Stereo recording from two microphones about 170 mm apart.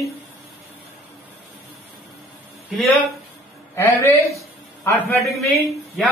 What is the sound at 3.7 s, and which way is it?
A man's voice, 15° left (ahead or behind).